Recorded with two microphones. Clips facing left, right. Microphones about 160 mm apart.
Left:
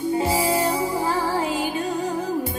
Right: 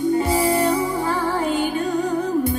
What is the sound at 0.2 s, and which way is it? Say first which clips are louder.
Music: right 2 dB; 25° left (ahead or behind).